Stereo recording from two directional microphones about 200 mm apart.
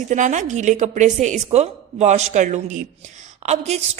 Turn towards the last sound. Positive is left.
turn(degrees=-35)  # may be behind; listen again after turning